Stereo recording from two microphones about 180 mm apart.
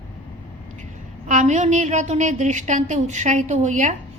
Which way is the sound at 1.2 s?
45° right (ahead or behind).